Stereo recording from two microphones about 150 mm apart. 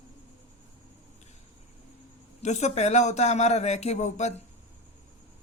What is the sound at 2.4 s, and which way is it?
A man's voice, 50° left (ahead or behind).